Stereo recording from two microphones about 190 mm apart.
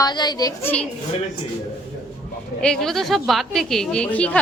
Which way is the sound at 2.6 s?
5° left (ahead or behind).